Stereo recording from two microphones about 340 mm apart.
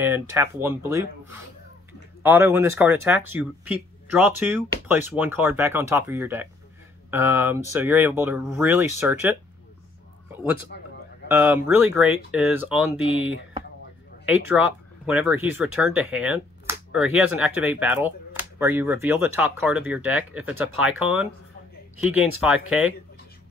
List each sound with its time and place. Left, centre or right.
0.0 s speech: centre
10.7 s a sound: left
11.2 s speech: centre